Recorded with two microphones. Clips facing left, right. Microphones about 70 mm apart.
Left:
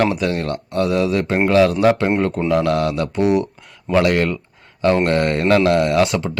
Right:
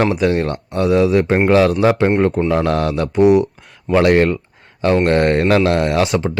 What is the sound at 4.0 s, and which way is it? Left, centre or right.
Speech, right.